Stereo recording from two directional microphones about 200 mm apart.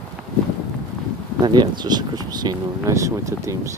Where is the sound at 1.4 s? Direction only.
20° right (ahead or behind).